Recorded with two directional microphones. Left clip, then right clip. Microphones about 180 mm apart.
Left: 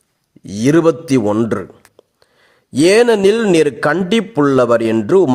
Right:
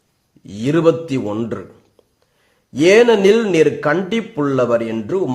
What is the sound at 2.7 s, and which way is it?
Speech, 40° left (ahead or behind).